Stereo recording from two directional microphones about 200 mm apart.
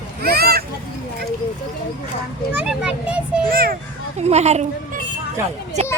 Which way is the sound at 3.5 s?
45° right (ahead or behind).